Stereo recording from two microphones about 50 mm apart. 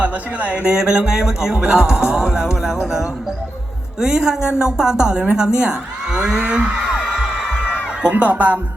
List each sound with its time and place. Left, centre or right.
0.0 s speech: right
0.7 s speech: centre
4.0 s speech: centre
5.2 s a sound: centre
8.1 s speech: right